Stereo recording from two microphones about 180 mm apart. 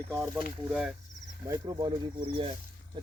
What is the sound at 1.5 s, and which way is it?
Speech, 20° right (ahead or behind).